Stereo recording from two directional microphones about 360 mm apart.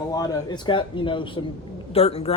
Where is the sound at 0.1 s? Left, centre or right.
Centre.